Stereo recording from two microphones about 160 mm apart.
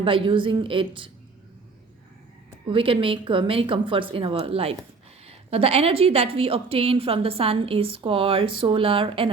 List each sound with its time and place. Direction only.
0.0 s a woman's voice: 35° right (ahead or behind)
2.6 s a woman's voice: 35° right (ahead or behind)